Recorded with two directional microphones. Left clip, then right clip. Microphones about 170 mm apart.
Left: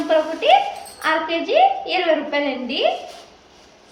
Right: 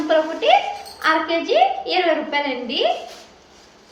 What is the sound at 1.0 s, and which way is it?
A woman's voice, 5° left (ahead or behind).